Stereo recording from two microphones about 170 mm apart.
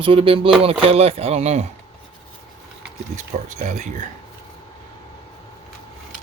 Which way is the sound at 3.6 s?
45° right (ahead or behind).